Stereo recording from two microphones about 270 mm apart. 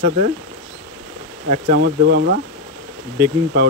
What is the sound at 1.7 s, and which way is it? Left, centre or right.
Speech, right.